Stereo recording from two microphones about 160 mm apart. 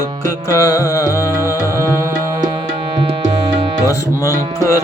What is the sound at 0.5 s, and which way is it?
Music, 20° left (ahead or behind).